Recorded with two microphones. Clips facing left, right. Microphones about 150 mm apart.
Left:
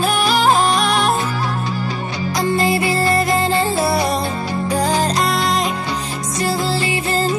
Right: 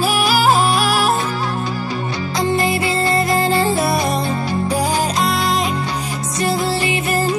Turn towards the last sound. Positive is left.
turn(degrees=-20)  # may be behind; listen again after turning